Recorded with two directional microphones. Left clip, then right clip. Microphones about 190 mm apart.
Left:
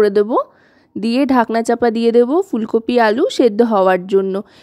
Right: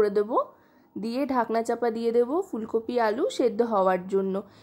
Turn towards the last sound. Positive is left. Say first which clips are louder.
# left 10 dB
turn(degrees=40)  # may be behind; listen again after turning